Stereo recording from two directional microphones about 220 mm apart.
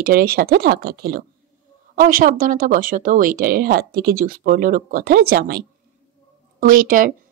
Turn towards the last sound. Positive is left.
turn(degrees=-35)  # may be behind; listen again after turning